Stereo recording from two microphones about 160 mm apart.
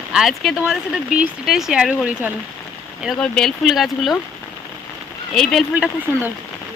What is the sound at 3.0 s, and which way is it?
Speech, 5° left (ahead or behind).